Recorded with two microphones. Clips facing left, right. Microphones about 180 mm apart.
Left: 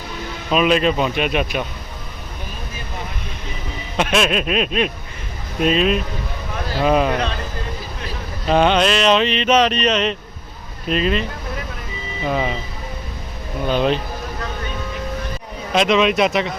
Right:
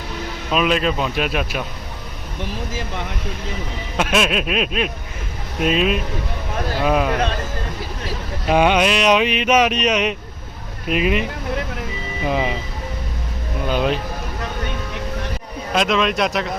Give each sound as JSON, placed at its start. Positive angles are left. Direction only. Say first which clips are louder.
{"t": 0.5, "sound": "speech", "louder": "left 3 dB", "side_deg": 0}
{"t": 2.4, "sound": "speech", "louder": "right 8 dB", "side_deg": -85}
{"t": 3.9, "sound": "speech", "louder": "left 1 dB", "side_deg": -5}
{"t": 8.4, "sound": "speech", "louder": "even", "side_deg": -10}
{"t": 13.7, "sound": "speech", "louder": "left 2 dB", "side_deg": -10}
{"t": 15.7, "sound": "speech", "louder": "left 3 dB", "side_deg": 0}